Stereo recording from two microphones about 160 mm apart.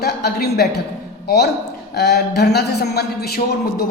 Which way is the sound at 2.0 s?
90° left.